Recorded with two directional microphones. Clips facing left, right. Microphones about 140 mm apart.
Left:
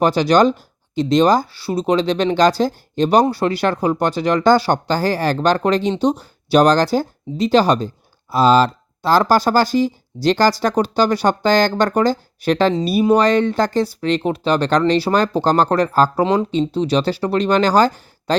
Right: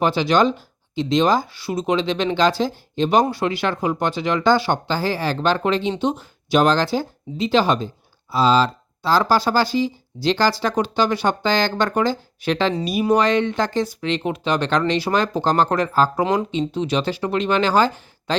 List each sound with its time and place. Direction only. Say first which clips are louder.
0.0 s speech: left 4 dB; 40° left (ahead or behind)